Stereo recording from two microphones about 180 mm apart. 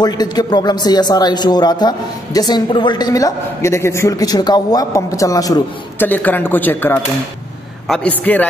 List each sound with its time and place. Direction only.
0.0 s a man's voice: 20° left (ahead or behind)